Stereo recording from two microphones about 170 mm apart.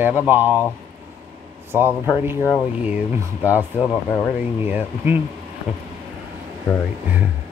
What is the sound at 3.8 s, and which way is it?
Speech, 10° left (ahead or behind).